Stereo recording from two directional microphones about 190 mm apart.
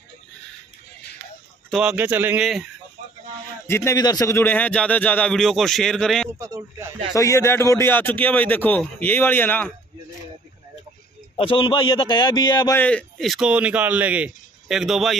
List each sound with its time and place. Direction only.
1.7 s a man's voice: 5° right (ahead or behind)
3.6 s speech: 15° left (ahead or behind)
6.3 s a man's voice: 15° right (ahead or behind)
7.2 s speech: 15° left (ahead or behind)
11.3 s a man's voice: 30° left (ahead or behind)
12.7 s a man's voice: 5° left (ahead or behind)